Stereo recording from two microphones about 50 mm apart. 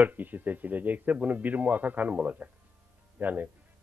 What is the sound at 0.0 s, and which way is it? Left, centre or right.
Speech, right.